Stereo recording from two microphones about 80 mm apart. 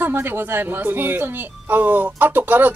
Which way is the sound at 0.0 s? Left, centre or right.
Right.